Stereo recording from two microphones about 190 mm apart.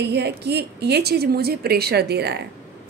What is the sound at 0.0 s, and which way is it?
A woman's voice, 60° right (ahead or behind).